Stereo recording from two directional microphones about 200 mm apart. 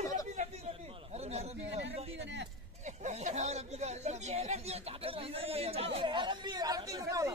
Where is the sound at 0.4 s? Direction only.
35° right (ahead or behind).